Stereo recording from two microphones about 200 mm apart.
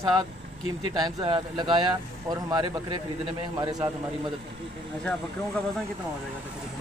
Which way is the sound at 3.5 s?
20° right (ahead or behind).